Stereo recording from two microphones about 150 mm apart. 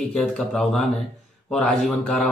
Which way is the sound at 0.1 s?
5° left (ahead or behind).